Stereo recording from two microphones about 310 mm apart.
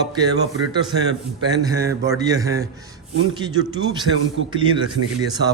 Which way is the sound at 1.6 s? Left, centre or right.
Centre.